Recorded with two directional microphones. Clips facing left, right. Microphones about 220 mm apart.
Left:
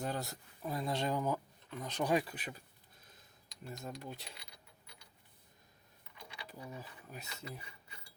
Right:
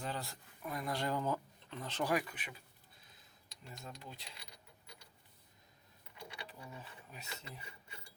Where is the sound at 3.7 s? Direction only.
50° left (ahead or behind).